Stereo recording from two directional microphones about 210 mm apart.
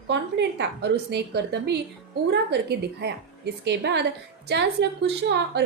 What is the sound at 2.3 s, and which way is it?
A woman's voice, 50° right (ahead or behind).